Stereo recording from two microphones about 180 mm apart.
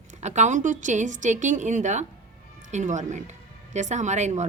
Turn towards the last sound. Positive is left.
turn(degrees=-40)  # may be behind; listen again after turning